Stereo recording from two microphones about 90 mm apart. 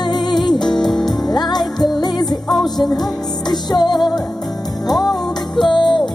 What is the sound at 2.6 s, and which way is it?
Music, 50° left (ahead or behind).